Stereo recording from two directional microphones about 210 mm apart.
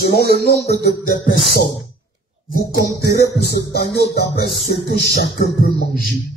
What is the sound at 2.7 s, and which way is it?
Music, 45° left (ahead or behind).